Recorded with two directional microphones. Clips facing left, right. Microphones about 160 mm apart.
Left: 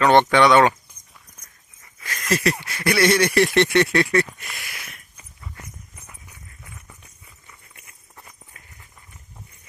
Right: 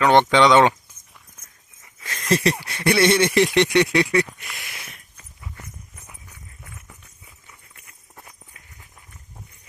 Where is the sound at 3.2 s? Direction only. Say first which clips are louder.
Even; 15° right (ahead or behind).